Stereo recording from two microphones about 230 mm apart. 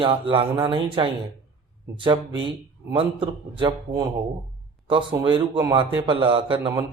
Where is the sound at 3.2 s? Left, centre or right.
Right.